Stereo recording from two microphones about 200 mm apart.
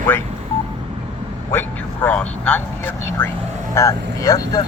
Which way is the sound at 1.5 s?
10° left (ahead or behind).